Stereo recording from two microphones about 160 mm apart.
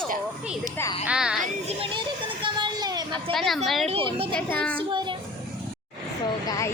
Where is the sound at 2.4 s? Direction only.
30° right (ahead or behind).